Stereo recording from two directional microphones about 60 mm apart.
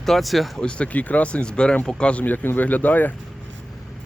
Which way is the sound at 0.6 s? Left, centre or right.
Centre.